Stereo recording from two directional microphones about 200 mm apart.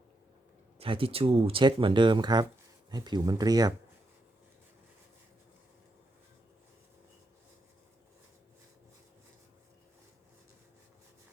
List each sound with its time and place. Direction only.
0.8 s speech: 25° right (ahead or behind)